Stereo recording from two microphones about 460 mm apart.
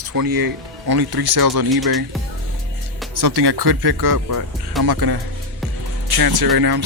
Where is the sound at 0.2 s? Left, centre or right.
Right.